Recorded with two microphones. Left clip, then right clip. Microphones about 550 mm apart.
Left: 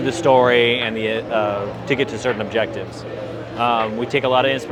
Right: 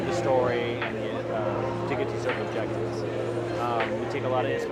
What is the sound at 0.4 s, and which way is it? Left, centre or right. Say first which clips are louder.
Speech: left 12 dB; left.